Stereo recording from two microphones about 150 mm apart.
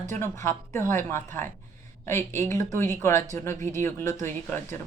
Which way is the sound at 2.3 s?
55° right (ahead or behind).